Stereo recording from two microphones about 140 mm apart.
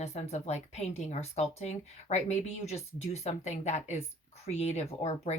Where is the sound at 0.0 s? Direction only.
50° left (ahead or behind).